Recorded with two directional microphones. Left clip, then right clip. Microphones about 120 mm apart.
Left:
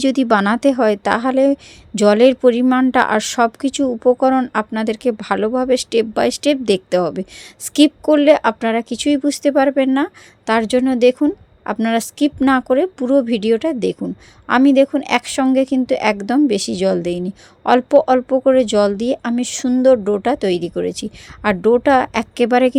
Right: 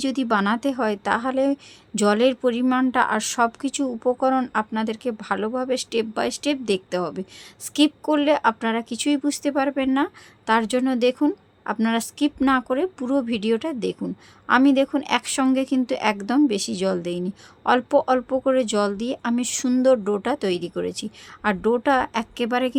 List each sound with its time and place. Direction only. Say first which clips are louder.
0.0 s speech: left 7 dB; 45° left (ahead or behind)
19.3 s speech: left 4 dB; 25° left (ahead or behind); by 22.8 s 45° left (ahead or behind)